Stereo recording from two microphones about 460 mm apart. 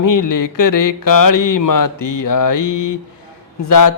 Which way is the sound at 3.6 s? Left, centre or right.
Left.